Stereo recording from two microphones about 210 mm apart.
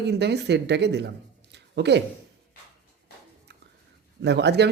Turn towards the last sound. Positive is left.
turn(degrees=-55)  # may be behind; listen again after turning